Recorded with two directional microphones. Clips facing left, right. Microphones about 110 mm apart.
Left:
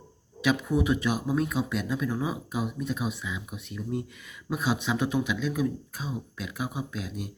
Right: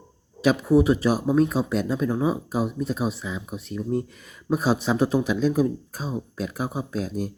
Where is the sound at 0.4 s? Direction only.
35° right (ahead or behind).